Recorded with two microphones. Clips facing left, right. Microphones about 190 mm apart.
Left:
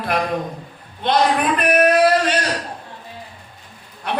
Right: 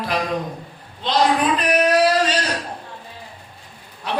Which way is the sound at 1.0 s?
55° left (ahead or behind).